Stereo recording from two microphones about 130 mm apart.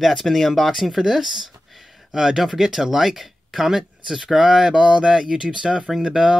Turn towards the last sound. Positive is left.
turn(degrees=-5)  # may be behind; listen again after turning